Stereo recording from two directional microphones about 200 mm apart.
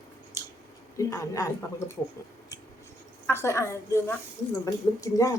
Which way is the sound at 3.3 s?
15° left (ahead or behind).